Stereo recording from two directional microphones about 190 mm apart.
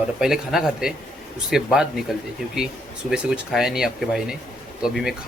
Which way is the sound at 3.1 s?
Centre (ahead or behind).